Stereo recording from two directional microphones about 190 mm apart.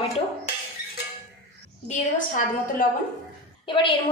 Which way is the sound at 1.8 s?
45° left (ahead or behind).